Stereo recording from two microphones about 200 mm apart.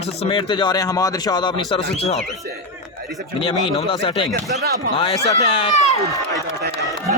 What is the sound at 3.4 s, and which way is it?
Speech, 30° left (ahead or behind).